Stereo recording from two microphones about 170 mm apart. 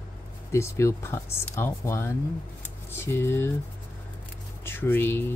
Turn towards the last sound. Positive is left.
turn(degrees=15)  # may be behind; listen again after turning